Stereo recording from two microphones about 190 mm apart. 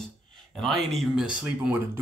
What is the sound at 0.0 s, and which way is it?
Speech, centre (ahead or behind).